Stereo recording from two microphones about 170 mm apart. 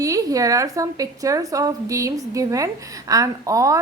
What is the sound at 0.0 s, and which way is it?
A woman's voice, 20° right (ahead or behind).